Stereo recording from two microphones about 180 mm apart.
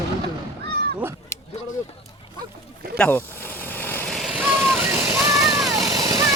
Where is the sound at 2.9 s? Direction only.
10° left (ahead or behind); by 5.4 s 15° right (ahead or behind).